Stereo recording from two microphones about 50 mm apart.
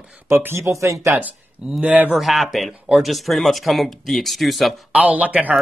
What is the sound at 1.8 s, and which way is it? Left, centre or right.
Speech, right.